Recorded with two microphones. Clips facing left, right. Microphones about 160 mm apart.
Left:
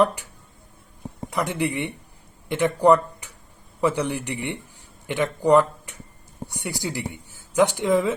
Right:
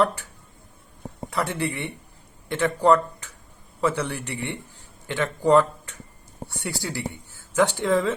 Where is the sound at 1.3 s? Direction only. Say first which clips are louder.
Left 2 dB; 15° left (ahead or behind).